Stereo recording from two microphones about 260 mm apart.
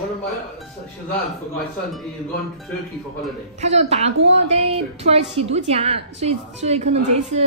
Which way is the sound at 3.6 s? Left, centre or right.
Right.